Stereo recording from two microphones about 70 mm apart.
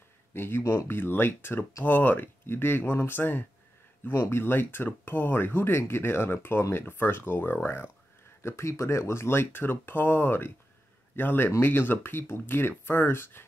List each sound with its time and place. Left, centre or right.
0.3 s speech: left